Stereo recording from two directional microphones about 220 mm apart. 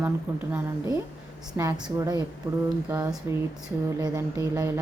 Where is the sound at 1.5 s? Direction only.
15° right (ahead or behind).